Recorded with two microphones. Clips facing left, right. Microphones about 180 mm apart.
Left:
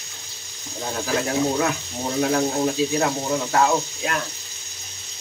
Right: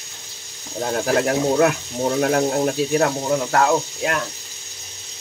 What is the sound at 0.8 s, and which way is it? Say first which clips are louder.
Frying: right 5 dB; 55° right (ahead or behind).